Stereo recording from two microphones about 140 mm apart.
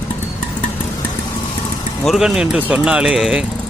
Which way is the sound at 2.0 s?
Centre (ahead or behind).